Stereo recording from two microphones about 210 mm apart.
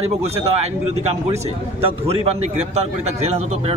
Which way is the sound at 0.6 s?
30° right (ahead or behind).